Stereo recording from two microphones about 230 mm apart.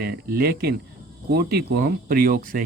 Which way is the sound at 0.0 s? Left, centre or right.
Right.